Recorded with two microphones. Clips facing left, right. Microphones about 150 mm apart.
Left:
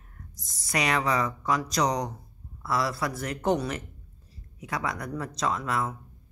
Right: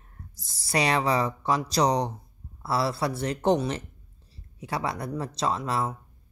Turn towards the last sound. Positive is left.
turn(degrees=-30)  # may be behind; listen again after turning